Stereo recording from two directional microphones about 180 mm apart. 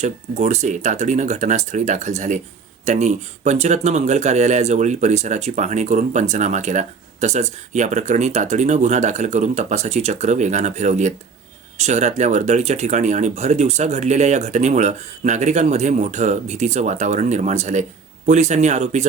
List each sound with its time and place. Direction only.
0.0 s speech: 40° right (ahead or behind)